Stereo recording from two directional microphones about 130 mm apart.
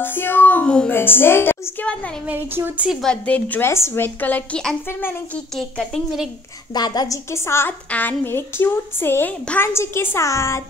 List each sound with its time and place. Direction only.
0.0 s a woman's voice: 15° left (ahead or behind)
2.2 s speech: 15° right (ahead or behind)
2.9 s a woman's voice: 5° left (ahead or behind)
5.6 s speech: centre (ahead or behind)
6.7 s a woman's voice: 30° left (ahead or behind)
7.2 s a woman's voice: 20° left (ahead or behind)